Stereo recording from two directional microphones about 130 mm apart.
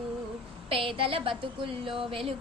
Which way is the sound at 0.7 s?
45° right (ahead or behind).